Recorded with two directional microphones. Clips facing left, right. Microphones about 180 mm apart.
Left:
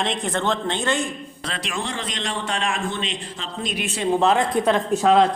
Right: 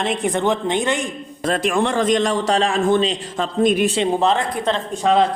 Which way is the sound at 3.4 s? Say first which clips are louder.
Right 13 dB; 50° right (ahead or behind).